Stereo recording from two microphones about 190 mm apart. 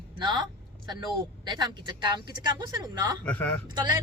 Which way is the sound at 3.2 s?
10° left (ahead or behind).